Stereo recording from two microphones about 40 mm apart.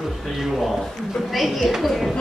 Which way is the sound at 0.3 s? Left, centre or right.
Centre.